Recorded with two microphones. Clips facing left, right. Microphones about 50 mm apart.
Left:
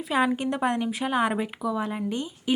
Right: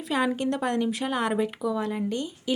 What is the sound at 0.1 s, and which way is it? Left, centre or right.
A woman's voice, centre.